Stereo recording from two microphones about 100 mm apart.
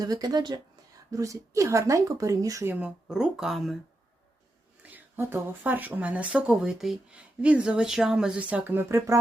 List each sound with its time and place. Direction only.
0.0 s speech: 40° right (ahead or behind)
1.1 s speech: 35° right (ahead or behind)
2.6 s speech: 15° right (ahead or behind)
4.8 s speech: 20° right (ahead or behind)